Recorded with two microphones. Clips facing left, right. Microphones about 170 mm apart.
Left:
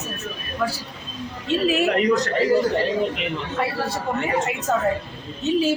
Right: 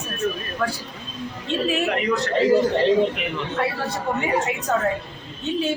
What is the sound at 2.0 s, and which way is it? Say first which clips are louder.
Speech: left 3 dB; 40° left (ahead or behind).